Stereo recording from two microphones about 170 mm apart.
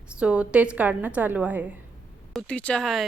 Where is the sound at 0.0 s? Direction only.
5° right (ahead or behind).